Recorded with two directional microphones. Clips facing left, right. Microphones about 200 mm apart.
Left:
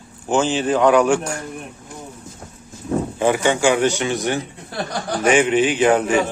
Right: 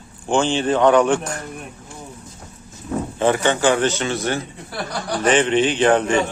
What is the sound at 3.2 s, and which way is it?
A man's voice, 10° left (ahead or behind).